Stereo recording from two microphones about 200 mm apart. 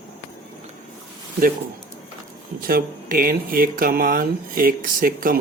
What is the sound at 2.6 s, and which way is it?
Speech, 45° right (ahead or behind).